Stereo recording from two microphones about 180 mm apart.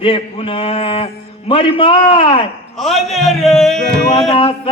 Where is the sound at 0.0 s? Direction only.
30° left (ahead or behind).